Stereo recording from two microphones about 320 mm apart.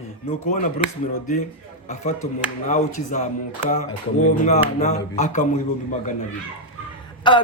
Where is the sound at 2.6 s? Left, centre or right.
Left.